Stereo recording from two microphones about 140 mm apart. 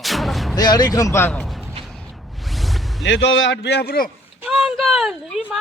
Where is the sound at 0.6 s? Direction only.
30° left (ahead or behind).